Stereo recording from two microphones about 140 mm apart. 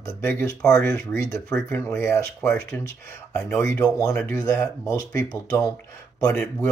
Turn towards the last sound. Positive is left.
turn(degrees=20)  # may be behind; listen again after turning